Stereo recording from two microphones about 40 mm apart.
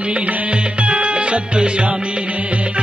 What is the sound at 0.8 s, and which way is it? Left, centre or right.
Music, right.